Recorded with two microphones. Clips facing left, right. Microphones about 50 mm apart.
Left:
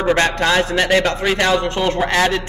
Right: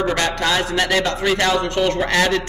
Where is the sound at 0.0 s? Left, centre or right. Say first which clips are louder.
Left 4 dB; left.